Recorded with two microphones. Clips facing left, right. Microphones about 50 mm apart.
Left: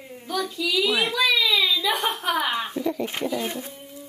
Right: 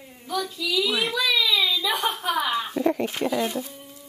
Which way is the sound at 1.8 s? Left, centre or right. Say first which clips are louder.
Left 1 dB; left.